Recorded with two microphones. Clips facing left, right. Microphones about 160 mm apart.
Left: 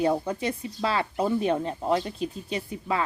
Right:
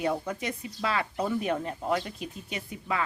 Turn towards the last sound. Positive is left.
turn(degrees=30)  # may be behind; listen again after turning